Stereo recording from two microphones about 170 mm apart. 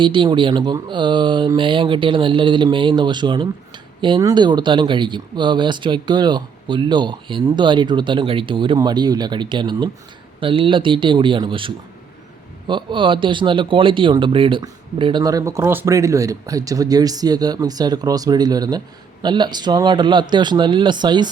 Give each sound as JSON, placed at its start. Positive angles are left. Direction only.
{"t": 0.0, "sound": "speech", "side_deg": -30}